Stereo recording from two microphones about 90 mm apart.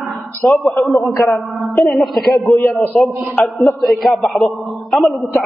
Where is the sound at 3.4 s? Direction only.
15° left (ahead or behind).